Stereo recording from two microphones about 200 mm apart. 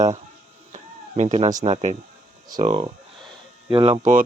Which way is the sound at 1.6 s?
35° right (ahead or behind).